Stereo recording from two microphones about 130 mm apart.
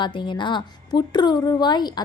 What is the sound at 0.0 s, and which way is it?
A woman's voice, 40° left (ahead or behind).